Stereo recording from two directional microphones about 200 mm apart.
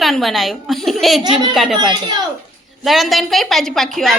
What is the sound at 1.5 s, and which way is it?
A woman's voice, centre (ahead or behind).